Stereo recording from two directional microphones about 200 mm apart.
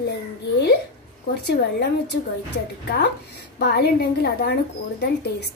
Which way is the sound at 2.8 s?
55° left (ahead or behind).